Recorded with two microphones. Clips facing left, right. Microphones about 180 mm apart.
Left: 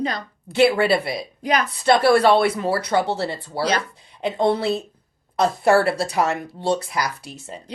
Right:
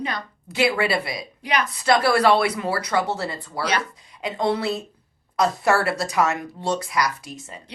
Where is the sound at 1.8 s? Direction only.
25° left (ahead or behind).